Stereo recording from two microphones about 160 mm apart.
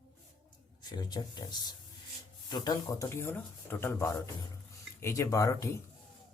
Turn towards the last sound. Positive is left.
turn(degrees=20)  # may be behind; listen again after turning